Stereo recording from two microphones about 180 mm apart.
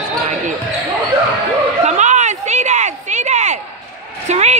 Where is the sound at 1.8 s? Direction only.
40° right (ahead or behind).